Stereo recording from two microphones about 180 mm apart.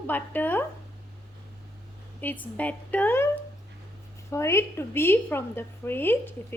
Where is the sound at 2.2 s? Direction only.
10° left (ahead or behind).